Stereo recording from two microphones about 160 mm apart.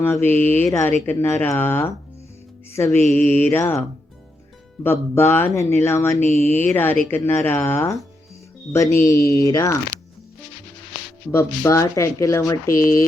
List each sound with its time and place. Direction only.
0.0 s speech: 15° left (ahead or behind)
4.8 s speech: 15° left (ahead or behind)
9.0 s speech: 20° left (ahead or behind)
11.3 s speech: 15° left (ahead or behind)